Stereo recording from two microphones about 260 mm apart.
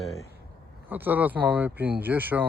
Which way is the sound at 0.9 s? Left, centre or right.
Centre.